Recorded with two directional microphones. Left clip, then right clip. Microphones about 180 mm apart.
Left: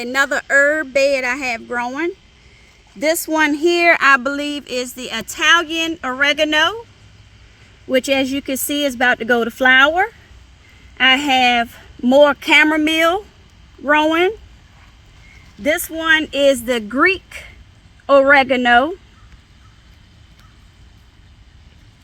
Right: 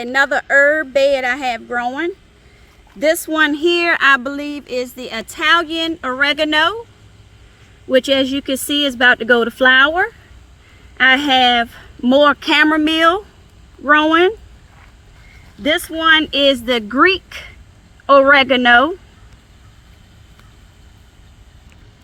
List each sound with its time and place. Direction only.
0.0 s a woman's voice: 45° left (ahead or behind)
7.9 s speech: 35° left (ahead or behind)
15.6 s a woman's voice: 30° left (ahead or behind); by 18.9 s 10° left (ahead or behind)